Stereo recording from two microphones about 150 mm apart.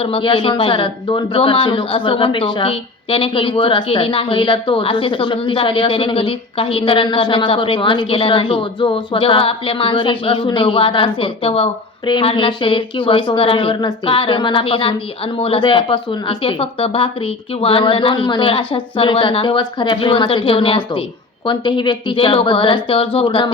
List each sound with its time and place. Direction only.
0.0 s speech: 35° left (ahead or behind)